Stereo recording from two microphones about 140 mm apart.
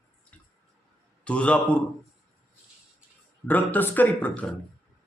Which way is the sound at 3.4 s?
10° left (ahead or behind).